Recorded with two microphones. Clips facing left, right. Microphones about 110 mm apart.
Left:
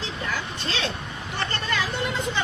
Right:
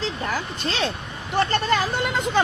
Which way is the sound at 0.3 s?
45° right (ahead or behind).